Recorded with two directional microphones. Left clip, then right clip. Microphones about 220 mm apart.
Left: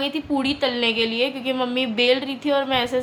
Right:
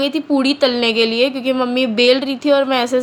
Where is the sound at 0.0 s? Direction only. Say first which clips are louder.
Right 7 dB; 25° right (ahead or behind).